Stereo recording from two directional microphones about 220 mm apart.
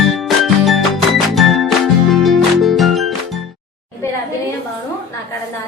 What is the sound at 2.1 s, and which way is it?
Music, centre (ahead or behind).